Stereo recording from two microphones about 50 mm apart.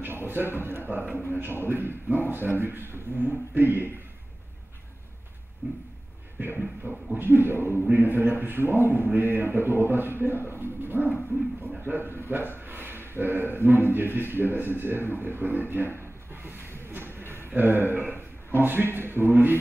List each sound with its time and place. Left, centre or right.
0.0 s speech: right
5.6 s a sound: right
6.8 s speech: right
16.0 s rub: right
16.9 s a sound: right
17.3 s a man's voice: right